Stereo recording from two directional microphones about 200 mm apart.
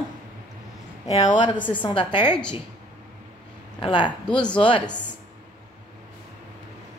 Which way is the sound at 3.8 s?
25° left (ahead or behind).